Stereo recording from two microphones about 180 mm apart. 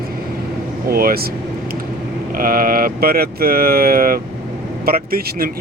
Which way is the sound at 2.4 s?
50° right (ahead or behind).